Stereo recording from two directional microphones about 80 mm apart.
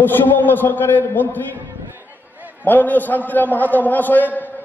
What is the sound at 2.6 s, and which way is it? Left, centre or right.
A man's voice, left.